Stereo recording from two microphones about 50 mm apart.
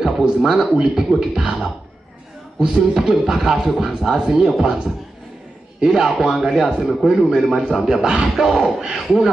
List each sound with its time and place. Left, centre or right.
0.4 s a man's voice: centre
5.8 s a man's voice: centre
6.8 s speech: centre
7.1 s a man's voice: centre